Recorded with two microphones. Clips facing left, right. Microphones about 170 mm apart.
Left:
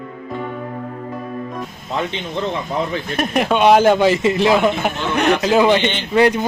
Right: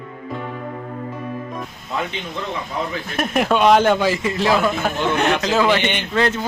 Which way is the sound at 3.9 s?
25° left (ahead or behind).